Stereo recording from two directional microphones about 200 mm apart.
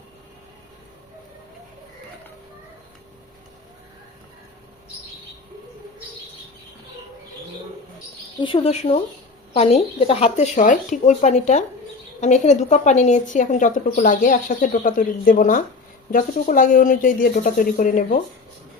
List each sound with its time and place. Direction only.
8.4 s a woman's voice: 25° left (ahead or behind); by 18.2 s 45° left (ahead or behind)